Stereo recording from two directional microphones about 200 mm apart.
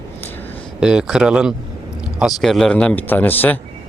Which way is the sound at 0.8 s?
5° right (ahead or behind).